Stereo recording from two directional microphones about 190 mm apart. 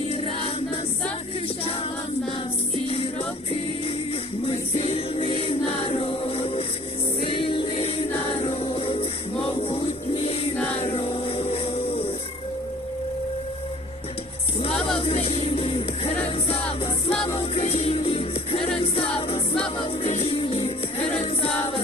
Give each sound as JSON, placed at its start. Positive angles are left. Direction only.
{"t": 0.1, "sound": "music", "side_deg": 30}
{"t": 2.9, "sound": "music", "side_deg": 30}
{"t": 4.4, "sound": "music", "side_deg": 30}
{"t": 14.6, "sound": "music", "side_deg": 30}